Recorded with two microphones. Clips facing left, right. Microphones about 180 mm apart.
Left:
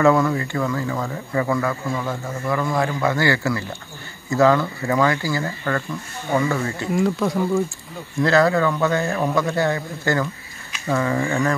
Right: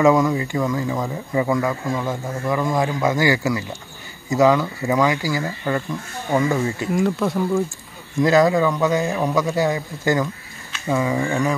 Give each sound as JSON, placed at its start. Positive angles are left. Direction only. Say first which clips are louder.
{"t": 0.0, "sound": "speech", "louder": "right 1 dB", "side_deg": -15}
{"t": 6.9, "sound": "speech", "louder": "left 2 dB", "side_deg": 0}
{"t": 8.2, "sound": "speech", "louder": "right 2 dB", "side_deg": -15}